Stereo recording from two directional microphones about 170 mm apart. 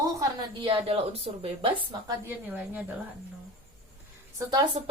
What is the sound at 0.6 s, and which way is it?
A woman's voice, 35° right (ahead or behind).